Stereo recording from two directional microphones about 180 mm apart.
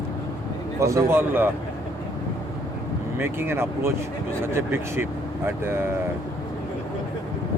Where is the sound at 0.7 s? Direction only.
15° right (ahead or behind).